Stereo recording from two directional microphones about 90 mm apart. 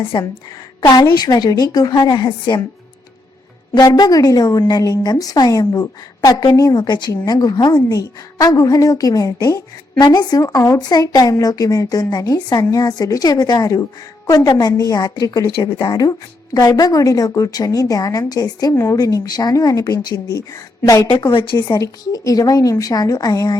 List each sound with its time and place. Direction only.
0.1 s a woman's voice: 60° left (ahead or behind)
1.1 s a woman's voice: 50° left (ahead or behind)
3.8 s a woman's voice: 50° left (ahead or behind)
21.1 s a woman's voice: 60° left (ahead or behind)
21.7 s a woman's voice: 40° left (ahead or behind)